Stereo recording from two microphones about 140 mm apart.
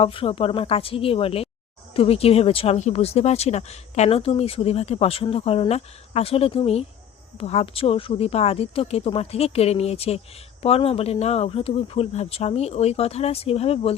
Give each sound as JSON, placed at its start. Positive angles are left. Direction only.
{"t": 0.0, "sound": "speech", "side_deg": 40}